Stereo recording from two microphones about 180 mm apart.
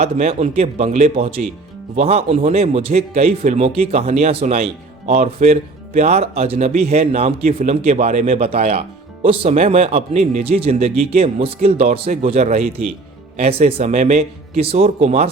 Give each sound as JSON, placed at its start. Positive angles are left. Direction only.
{"t": 0.0, "sound": "speech", "side_deg": -40}